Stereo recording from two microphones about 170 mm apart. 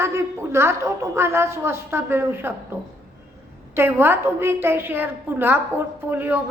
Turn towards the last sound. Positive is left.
turn(degrees=-10)  # may be behind; listen again after turning